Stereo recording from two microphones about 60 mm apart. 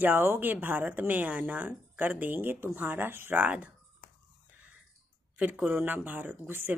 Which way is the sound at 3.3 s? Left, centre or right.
Right.